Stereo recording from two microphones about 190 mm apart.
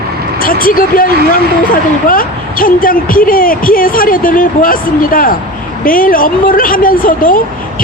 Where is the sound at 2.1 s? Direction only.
45° left (ahead or behind).